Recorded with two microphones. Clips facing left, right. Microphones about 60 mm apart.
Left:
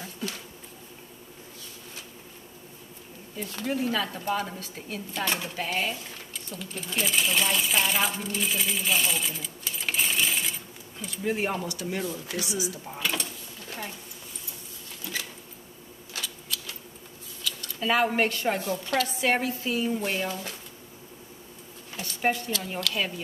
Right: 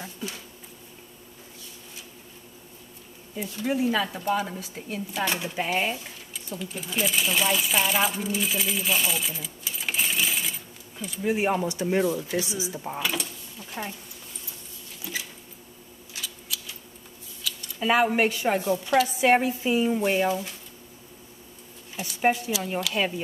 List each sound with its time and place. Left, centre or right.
0.0 s bee: centre
3.6 s speech: centre
5.6 s a woman's voice: centre
13.0 s speech: centre
13.8 s a woman's voice: right
15.1 s a sound: centre
16.5 s scissors: centre
17.6 s speech: centre
21.9 s speech: centre